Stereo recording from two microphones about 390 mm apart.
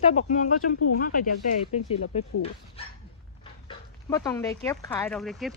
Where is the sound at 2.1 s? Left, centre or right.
Centre.